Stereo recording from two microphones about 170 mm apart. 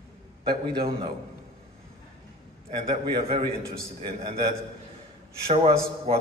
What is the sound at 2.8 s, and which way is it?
A man's voice, 30° right (ahead or behind).